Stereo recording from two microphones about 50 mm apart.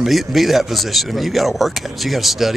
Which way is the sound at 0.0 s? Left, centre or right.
Centre.